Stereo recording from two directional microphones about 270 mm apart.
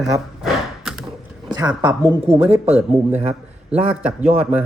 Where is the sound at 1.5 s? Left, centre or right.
Centre.